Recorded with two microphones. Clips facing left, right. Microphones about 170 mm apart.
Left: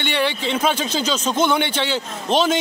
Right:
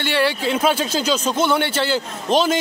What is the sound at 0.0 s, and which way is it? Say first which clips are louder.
A man's voice: right 2 dB; 5° right (ahead or behind).